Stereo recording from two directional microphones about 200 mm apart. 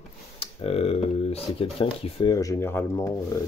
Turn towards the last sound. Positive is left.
turn(degrees=15)  # may be behind; listen again after turning